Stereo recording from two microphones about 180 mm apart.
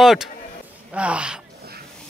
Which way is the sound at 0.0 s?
Centre (ahead or behind).